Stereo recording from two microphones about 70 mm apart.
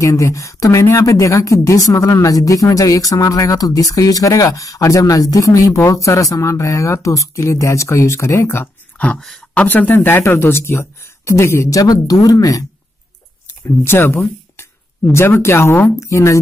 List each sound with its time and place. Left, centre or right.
0.0 s speech: left
8.9 s a sound: left
9.5 s speech: left
11.8 s speech: left
13.8 s speech: left